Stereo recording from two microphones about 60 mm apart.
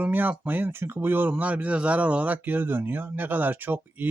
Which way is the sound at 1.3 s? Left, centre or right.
Right.